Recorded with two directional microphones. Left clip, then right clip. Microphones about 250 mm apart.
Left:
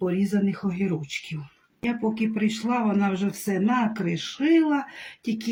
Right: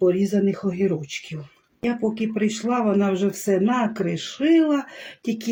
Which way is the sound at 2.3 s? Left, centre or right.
Centre.